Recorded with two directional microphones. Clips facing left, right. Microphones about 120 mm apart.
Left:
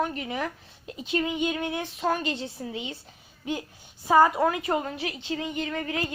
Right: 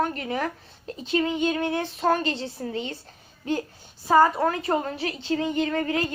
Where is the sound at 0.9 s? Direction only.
10° left (ahead or behind).